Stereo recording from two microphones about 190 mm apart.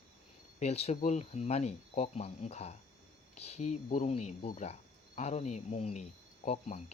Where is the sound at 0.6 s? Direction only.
35° left (ahead or behind).